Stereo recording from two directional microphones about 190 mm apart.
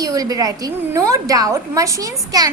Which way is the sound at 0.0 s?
20° right (ahead or behind).